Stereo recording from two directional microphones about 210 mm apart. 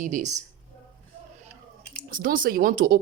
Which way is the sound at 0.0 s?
35° right (ahead or behind).